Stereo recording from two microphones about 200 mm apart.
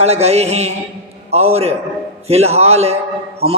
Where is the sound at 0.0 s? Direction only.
30° right (ahead or behind).